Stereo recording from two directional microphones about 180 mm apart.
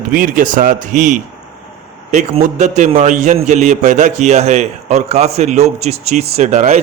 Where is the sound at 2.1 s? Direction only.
40° right (ahead or behind).